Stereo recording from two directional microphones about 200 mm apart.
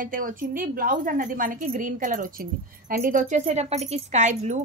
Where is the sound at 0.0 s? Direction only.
45° right (ahead or behind).